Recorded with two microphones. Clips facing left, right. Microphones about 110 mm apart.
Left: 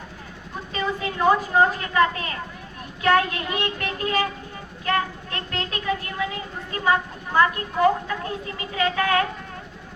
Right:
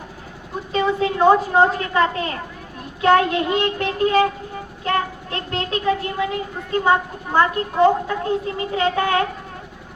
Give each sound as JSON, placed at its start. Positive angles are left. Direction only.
{"t": 0.7, "sound": "speech", "side_deg": -30}